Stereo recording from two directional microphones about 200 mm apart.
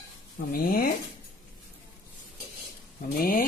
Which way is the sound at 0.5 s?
45° left (ahead or behind).